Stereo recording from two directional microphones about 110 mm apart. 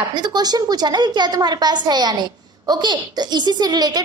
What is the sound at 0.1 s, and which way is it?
A woman's voice, 40° right (ahead or behind).